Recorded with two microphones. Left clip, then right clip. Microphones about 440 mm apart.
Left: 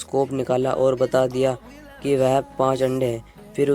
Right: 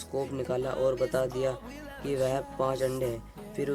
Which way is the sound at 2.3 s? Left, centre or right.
Right.